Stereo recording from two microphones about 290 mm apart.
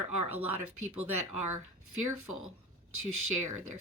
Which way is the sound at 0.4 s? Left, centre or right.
Right.